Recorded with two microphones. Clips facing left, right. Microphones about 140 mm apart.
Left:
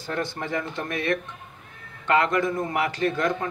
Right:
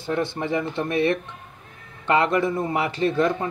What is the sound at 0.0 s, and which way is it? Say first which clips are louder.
A man's voice: right 4 dB; 25° right (ahead or behind).